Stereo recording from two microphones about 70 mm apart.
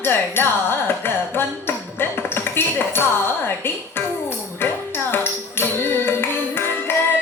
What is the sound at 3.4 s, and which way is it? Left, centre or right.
Music, left.